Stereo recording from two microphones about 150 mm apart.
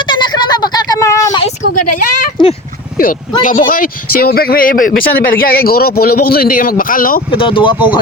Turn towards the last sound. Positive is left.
turn(degrees=35)  # may be behind; listen again after turning